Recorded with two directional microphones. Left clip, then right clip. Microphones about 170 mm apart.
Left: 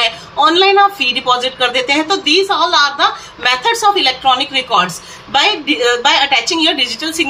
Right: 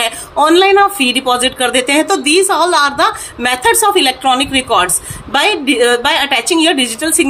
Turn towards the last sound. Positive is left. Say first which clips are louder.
# right 2 dB
turn(degrees=-35)  # may be behind; listen again after turning